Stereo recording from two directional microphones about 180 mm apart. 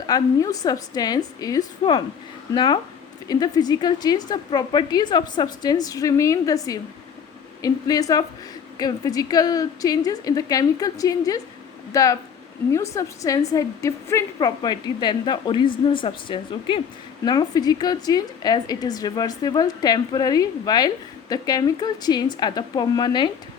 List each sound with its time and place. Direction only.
0.1 s a woman's voice: 20° left (ahead or behind)